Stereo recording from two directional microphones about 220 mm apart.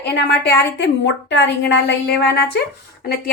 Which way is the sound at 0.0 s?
50° left (ahead or behind).